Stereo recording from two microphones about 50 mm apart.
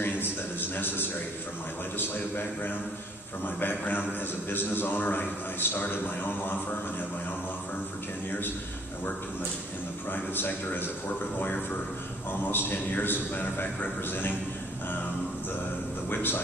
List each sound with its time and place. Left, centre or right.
0.0 s a sound: left
2.0 s a man's voice: left
8.3 s a man's voice: left
10.1 s a man's voice: left
16.1 s a man's voice: left